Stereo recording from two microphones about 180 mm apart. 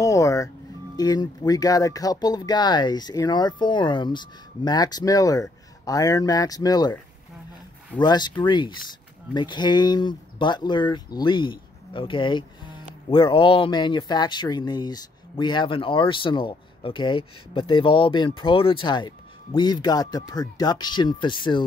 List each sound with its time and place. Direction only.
0.0 s music: 20° left (ahead or behind)
0.9 s speech: 20° left (ahead or behind)
8.0 s speech: 25° left (ahead or behind)